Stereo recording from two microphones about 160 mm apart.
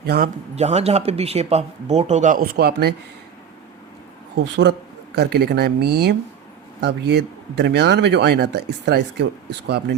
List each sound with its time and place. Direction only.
0.0 s speech: 75° right (ahead or behind)
0.5 s speech: 40° right (ahead or behind); by 2.9 s 80° right
5.1 s speech: 90° right